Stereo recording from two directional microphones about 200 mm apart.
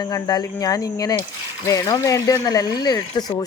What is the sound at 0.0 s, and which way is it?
Speech, 20° left (ahead or behind).